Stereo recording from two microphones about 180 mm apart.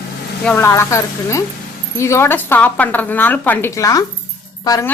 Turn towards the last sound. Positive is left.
turn(degrees=20)  # may be behind; listen again after turning